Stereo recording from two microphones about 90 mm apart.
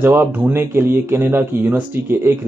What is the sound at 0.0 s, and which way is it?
Speech, 25° right (ahead or behind).